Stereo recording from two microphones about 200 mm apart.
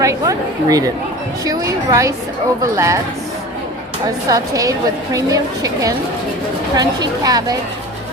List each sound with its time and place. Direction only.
0.0 s a woman's voice: 15° right (ahead or behind)
4.3 s a woman's voice: 15° right (ahead or behind)